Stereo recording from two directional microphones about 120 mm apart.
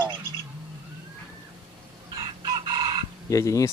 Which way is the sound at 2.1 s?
40° right (ahead or behind).